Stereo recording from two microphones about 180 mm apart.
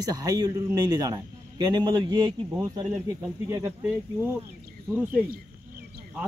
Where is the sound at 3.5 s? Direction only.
15° right (ahead or behind).